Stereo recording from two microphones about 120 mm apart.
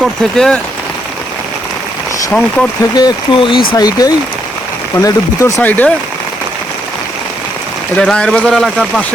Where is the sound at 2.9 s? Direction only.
40° left (ahead or behind).